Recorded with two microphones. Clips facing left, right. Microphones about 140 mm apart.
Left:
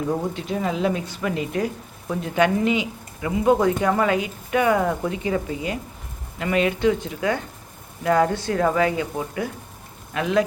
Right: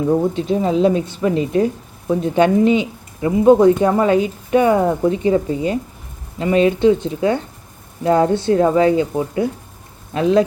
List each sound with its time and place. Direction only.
0.1 s speech: 25° right (ahead or behind)